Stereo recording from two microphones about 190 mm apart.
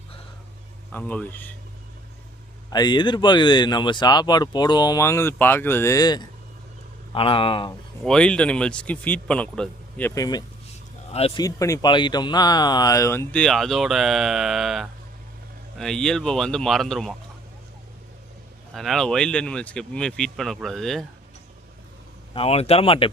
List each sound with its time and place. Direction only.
0.9 s speech: 10° left (ahead or behind)
2.6 s speech: 20° left (ahead or behind)
8.0 s speech: 5° left (ahead or behind)
10.2 s speech: 20° left (ahead or behind)
11.1 s speech: 30° left (ahead or behind)
11.4 s speech: 20° left (ahead or behind); by 17.2 s centre (ahead or behind)
18.7 s speech: centre (ahead or behind)
22.4 s speech: 30° left (ahead or behind)